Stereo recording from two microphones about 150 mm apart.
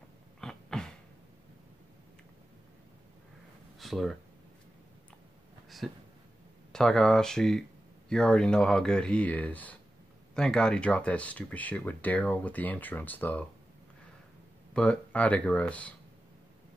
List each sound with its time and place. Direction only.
0.4 s a sound: 5° left (ahead or behind)
3.8 s speech: centre (ahead or behind)
5.8 s speech: centre (ahead or behind)
14.7 s speech: 5° left (ahead or behind)